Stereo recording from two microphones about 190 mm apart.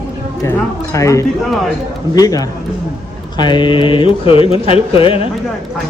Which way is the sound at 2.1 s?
20° left (ahead or behind).